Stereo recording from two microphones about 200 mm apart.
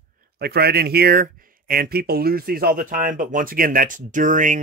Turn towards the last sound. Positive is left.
turn(degrees=-40)  # may be behind; listen again after turning